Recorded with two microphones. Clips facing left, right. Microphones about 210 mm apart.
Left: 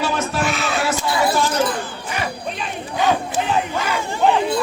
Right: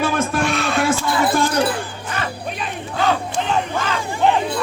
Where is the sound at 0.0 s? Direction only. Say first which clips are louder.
Right 2 dB; 50° right (ahead or behind).